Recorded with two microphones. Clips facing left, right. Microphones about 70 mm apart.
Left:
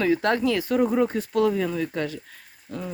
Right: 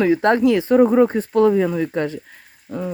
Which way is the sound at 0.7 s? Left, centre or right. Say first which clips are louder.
Right 9 dB; right.